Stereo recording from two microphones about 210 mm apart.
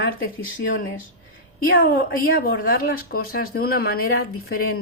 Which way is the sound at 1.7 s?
45° left (ahead or behind).